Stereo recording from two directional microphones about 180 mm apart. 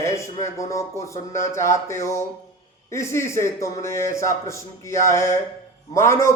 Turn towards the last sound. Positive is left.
turn(degrees=15)  # may be behind; listen again after turning